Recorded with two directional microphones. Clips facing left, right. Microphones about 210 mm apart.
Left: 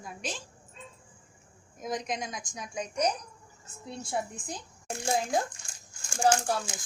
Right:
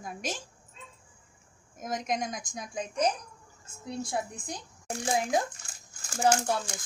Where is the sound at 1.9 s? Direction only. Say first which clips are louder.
Right 2 dB; 45° right (ahead or behind).